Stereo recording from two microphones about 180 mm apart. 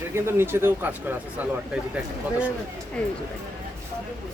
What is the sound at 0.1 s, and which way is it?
Speech, 15° right (ahead or behind).